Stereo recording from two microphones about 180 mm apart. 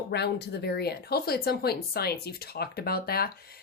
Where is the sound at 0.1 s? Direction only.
65° left (ahead or behind).